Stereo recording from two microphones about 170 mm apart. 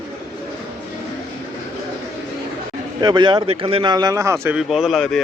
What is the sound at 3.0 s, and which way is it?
Speech, 25° right (ahead or behind).